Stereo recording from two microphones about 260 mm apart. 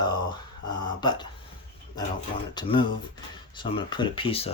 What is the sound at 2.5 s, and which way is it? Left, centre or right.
Speech, centre.